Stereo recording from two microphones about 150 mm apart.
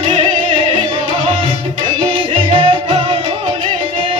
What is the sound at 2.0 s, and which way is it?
Music, 30° right (ahead or behind).